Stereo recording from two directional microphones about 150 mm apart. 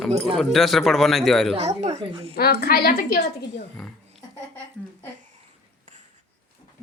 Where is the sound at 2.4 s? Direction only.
90° left.